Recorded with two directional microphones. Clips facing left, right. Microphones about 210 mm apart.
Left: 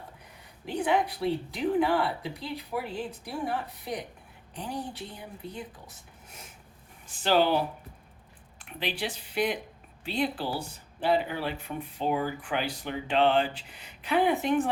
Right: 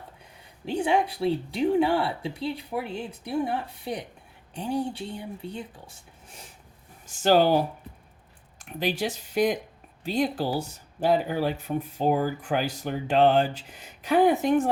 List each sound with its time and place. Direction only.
0.6 s speech: 30° right (ahead or behind)
7.2 s speech: 45° right (ahead or behind)
8.6 s speech: 45° right (ahead or behind)